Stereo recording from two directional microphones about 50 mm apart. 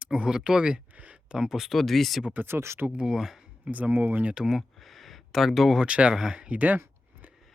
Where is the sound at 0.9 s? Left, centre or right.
Right.